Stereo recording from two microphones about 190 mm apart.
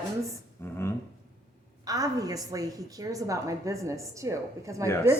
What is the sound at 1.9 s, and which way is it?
A woman's voice, 20° right (ahead or behind).